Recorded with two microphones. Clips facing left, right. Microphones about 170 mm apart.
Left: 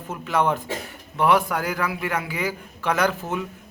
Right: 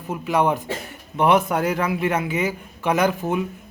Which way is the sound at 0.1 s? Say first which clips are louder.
Right 2 dB; 15° right (ahead or behind).